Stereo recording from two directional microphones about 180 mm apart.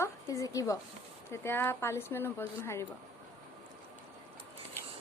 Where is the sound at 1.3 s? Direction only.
15° left (ahead or behind).